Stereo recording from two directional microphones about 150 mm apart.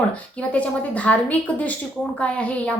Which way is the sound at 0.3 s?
10° left (ahead or behind).